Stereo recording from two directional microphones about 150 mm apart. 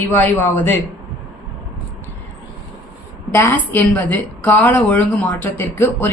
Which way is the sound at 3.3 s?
20° left (ahead or behind).